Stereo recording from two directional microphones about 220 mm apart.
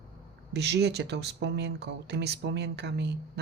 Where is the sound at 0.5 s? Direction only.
50° right (ahead or behind).